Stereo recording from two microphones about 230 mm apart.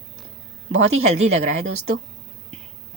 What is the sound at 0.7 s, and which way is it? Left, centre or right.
Speech, right.